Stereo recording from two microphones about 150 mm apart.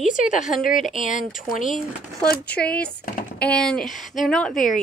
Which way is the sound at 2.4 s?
90° left.